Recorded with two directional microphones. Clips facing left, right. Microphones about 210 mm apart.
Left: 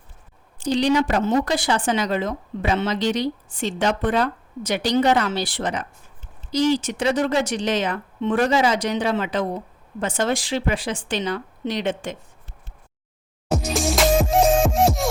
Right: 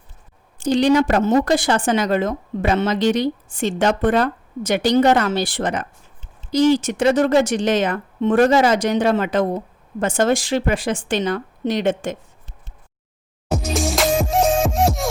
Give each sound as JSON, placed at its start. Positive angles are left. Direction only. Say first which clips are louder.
{"t": 0.6, "sound": "speech", "louder": "right 4 dB", "side_deg": -50}
{"t": 13.5, "sound": "music", "louder": "right 1 dB", "side_deg": 0}